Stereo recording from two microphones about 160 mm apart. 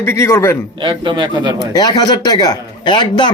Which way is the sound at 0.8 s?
30° right (ahead or behind).